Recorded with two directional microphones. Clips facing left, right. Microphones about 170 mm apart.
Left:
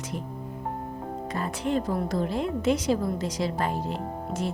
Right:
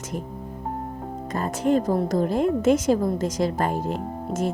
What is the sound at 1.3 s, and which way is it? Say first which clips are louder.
A woman's voice: right 6 dB; 45° right (ahead or behind).